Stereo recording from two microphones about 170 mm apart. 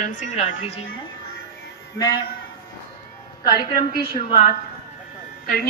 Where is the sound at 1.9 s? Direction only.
20° left (ahead or behind).